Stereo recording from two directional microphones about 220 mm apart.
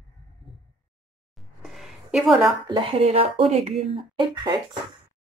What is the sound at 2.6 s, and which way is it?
Speech, 20° right (ahead or behind).